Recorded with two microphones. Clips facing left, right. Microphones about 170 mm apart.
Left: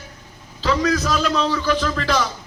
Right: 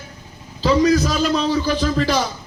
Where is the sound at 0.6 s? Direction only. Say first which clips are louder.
Right 5 dB; 35° right (ahead or behind).